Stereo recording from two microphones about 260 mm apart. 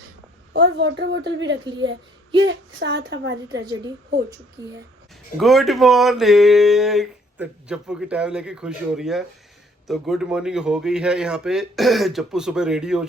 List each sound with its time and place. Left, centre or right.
0.5 s a woman's voice: right
3.5 s a woman's voice: centre
5.4 s speech: centre